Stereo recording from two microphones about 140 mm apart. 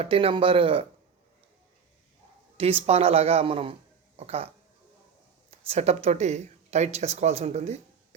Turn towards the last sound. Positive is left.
turn(degrees=-55)  # may be behind; listen again after turning